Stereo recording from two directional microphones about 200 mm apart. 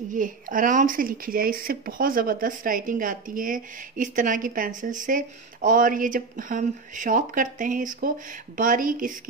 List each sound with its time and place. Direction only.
0.1 s speech: 40° right (ahead or behind)